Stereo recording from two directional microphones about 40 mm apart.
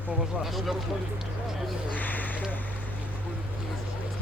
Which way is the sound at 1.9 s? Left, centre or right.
Left.